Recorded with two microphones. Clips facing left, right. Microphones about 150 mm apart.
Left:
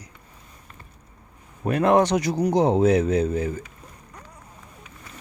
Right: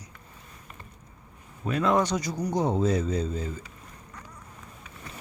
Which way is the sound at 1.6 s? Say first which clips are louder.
Left 6 dB; 60° left (ahead or behind).